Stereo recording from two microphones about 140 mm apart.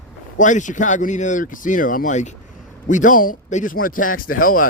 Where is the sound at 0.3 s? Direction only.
65° left (ahead or behind).